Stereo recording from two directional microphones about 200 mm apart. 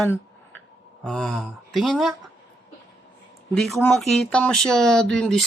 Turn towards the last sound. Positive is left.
turn(degrees=0)  # may be behind; listen again after turning